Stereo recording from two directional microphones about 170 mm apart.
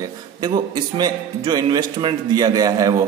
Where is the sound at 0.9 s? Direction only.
25° right (ahead or behind).